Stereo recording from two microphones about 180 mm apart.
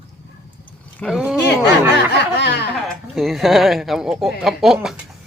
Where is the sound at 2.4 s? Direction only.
70° left (ahead or behind).